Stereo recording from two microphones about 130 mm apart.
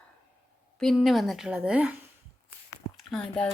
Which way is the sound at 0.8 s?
Centre (ahead or behind).